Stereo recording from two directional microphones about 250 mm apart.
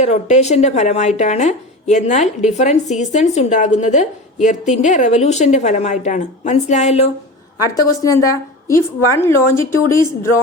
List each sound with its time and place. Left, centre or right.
0.0 s speech: left
7.8 s a woman's voice: centre